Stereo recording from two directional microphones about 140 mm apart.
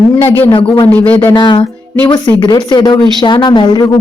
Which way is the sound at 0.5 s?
40° left (ahead or behind).